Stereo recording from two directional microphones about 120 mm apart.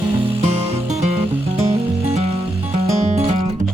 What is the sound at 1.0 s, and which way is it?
Music, 60° right (ahead or behind).